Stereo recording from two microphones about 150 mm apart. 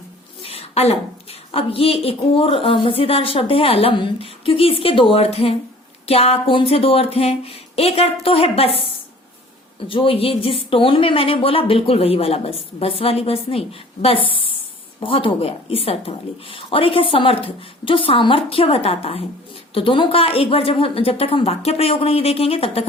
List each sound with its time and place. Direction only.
0.4 s a woman's voice: 40° left (ahead or behind)